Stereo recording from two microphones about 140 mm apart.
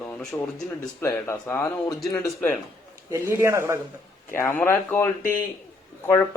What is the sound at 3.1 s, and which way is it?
Speech, 15° right (ahead or behind).